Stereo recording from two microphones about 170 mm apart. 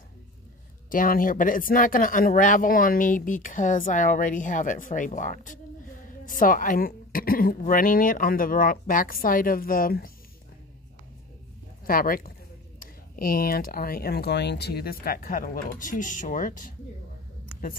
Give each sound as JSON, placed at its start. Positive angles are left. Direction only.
{"t": 0.8, "sound": "a woman's voice", "side_deg": 55}
{"t": 11.8, "sound": "a woman's voice", "side_deg": 60}